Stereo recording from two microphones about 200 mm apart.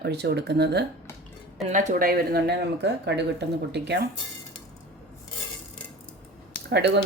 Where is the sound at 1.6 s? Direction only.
40° right (ahead or behind).